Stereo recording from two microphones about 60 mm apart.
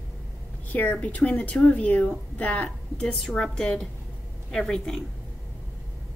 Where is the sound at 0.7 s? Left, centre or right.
Left; by 5.0 s centre.